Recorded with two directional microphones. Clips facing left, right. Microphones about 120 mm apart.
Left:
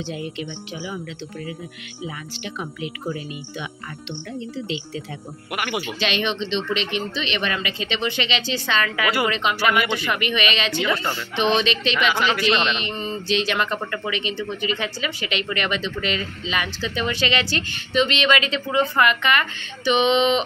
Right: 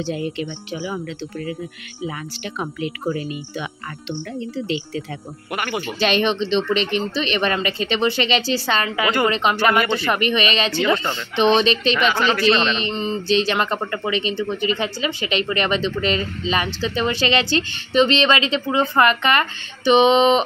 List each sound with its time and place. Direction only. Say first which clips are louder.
0.0 s speech: right 5 dB; 45° right (ahead or behind)
2.6 s speech: right 6 dB; 50° right (ahead or behind)
4.6 s speech: right 4 dB; 50° right (ahead or behind)
5.5 s speech: right 1 dB; 10° left (ahead or behind)
5.9 s speech: right 7 dB; 40° right (ahead or behind)
11.0 s speech: right 1 dB; 20° right (ahead or behind)
11.3 s speech: right 5 dB; 35° right (ahead or behind)